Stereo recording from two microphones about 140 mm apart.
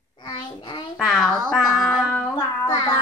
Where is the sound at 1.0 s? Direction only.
Centre (ahead or behind).